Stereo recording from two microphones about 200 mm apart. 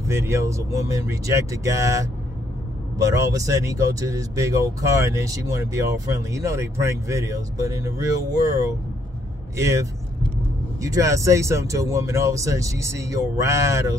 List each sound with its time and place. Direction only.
0.1 s speech: 15° right (ahead or behind)